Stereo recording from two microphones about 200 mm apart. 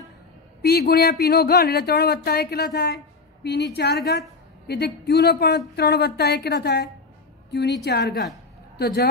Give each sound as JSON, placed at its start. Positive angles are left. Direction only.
{"t": 0.6, "sound": "a woman's voice", "side_deg": 50}